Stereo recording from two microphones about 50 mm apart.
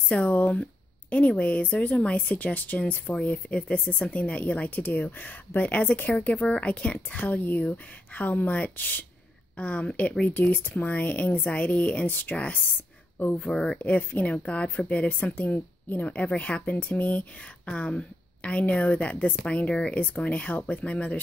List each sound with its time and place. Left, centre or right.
0.1 s speech: left
1.7 s speech: left
9.6 s speech: left
12.1 s speech: left
12.4 s speech: left
13.4 s speech: centre
13.7 s speech: left